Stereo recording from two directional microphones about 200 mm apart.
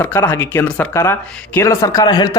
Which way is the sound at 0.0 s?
10° left (ahead or behind).